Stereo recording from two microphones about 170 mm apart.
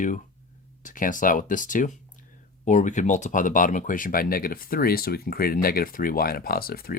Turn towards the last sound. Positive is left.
turn(degrees=60)  # may be behind; listen again after turning